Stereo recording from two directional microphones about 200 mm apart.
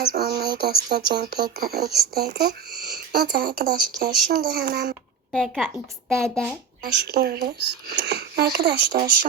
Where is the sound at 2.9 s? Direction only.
50° right (ahead or behind).